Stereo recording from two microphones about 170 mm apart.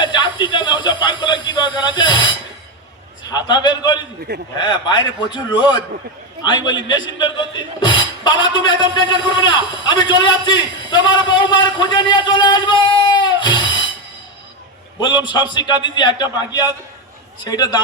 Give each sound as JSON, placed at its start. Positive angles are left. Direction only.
{"t": 0.0, "sound": "a sound", "side_deg": 25}
{"t": 3.2, "sound": "a man's voice", "side_deg": 25}
{"t": 14.9, "sound": "speech", "side_deg": 25}